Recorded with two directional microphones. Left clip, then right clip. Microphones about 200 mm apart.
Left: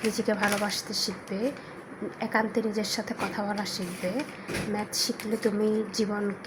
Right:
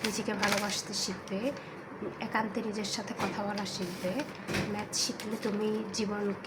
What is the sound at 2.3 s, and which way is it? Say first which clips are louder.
Speech: left 6 dB; 25° left (ahead or behind).